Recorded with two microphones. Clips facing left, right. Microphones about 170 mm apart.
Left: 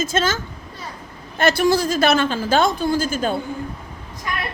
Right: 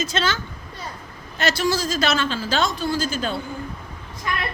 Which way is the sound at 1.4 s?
55° left (ahead or behind).